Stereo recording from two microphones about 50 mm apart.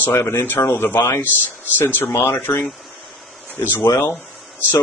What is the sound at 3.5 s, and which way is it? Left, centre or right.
Speech, left.